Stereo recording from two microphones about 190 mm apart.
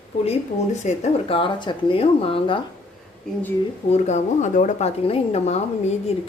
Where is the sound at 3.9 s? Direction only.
35° left (ahead or behind).